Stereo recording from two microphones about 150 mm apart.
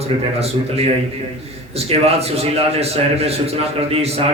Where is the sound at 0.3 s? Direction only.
45° right (ahead or behind).